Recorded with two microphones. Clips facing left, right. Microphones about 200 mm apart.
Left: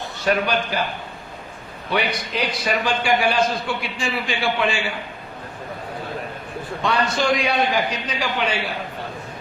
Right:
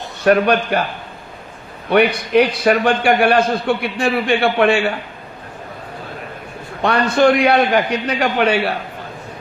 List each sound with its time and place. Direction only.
0.3 s a man's voice: 60° right (ahead or behind)
1.9 s a man's voice: 60° right (ahead or behind)
6.8 s a man's voice: 60° right (ahead or behind)